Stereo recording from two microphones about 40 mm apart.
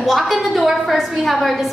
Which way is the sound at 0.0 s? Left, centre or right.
Centre.